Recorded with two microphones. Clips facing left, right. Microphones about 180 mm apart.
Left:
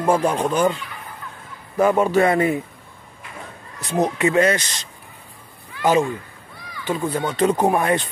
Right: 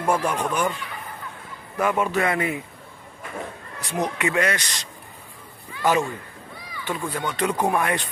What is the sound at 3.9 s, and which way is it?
Speech, 25° left (ahead or behind).